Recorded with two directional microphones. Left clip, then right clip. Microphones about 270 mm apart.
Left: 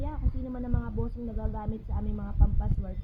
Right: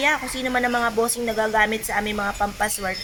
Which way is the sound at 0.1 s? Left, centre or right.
Right.